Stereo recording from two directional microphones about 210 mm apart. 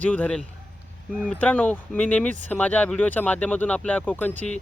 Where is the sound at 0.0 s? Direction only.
5° left (ahead or behind).